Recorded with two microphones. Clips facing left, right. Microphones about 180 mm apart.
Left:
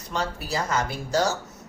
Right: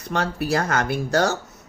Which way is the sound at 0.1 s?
60° right (ahead or behind).